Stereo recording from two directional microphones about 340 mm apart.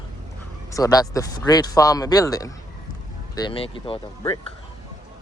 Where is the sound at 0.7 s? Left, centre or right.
Centre.